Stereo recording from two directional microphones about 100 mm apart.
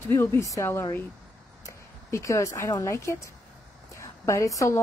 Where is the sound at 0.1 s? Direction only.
25° left (ahead or behind).